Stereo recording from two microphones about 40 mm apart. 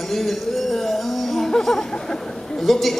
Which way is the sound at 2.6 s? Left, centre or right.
Centre.